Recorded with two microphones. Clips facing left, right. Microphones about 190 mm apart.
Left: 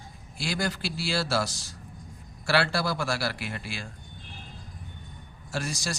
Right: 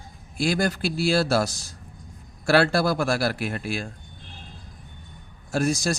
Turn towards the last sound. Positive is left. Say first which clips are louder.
# right 9 dB
turn(degrees=-50)  # may be behind; listen again after turning